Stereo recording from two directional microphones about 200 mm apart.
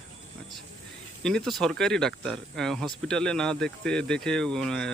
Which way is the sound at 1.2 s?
5° left (ahead or behind).